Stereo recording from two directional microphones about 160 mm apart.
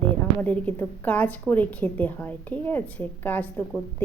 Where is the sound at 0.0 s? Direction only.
10° left (ahead or behind).